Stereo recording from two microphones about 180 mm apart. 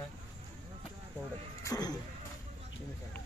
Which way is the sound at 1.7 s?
20° left (ahead or behind).